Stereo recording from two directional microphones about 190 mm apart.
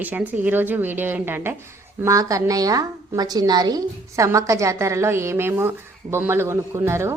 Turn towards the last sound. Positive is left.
turn(degrees=-15)  # may be behind; listen again after turning